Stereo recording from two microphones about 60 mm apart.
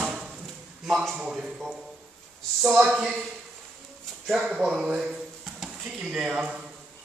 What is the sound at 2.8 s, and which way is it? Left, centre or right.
Speech, centre.